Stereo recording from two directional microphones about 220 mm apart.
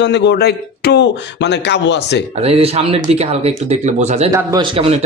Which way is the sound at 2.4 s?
25° right (ahead or behind).